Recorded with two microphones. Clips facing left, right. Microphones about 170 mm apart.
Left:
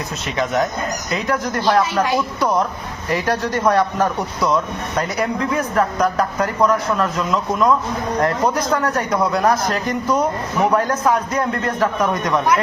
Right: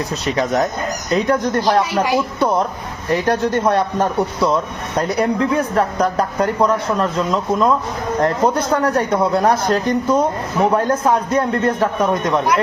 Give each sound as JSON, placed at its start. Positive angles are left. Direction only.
{"t": 0.1, "sound": "speech", "side_deg": -35}
{"t": 1.9, "sound": "speech", "side_deg": -10}
{"t": 3.2, "sound": "a man's voice", "side_deg": -25}